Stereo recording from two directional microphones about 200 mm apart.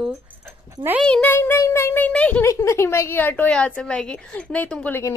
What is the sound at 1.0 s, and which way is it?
A child's voice, 5° left (ahead or behind).